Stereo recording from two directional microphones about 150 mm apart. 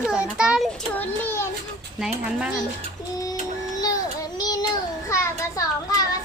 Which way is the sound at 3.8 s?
25° left (ahead or behind).